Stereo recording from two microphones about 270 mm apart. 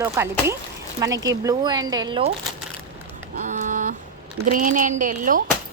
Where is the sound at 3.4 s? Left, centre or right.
Right.